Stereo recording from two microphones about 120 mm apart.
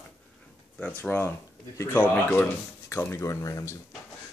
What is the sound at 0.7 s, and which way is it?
Speech, 10° left (ahead or behind).